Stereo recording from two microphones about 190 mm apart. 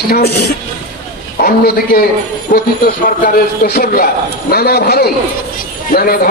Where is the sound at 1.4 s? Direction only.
50° left (ahead or behind).